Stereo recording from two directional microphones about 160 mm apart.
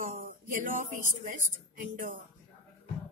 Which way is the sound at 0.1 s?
55° right (ahead or behind).